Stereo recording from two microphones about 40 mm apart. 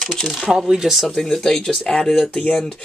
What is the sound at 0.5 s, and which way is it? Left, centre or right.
Speech, centre.